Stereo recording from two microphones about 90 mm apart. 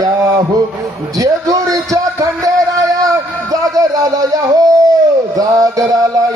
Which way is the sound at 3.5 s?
40° right (ahead or behind).